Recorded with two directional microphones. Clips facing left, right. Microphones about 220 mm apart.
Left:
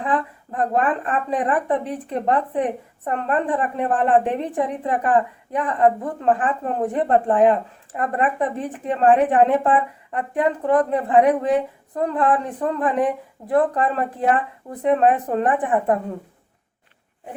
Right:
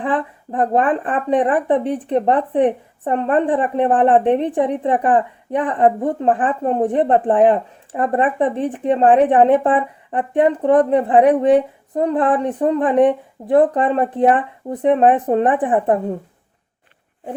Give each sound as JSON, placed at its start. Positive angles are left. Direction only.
{"t": 0.0, "sound": "speech", "side_deg": -30}